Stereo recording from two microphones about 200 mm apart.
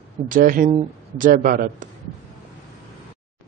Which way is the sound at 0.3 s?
45° right (ahead or behind).